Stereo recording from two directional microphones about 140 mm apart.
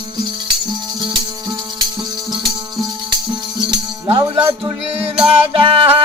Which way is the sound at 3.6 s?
40° right (ahead or behind).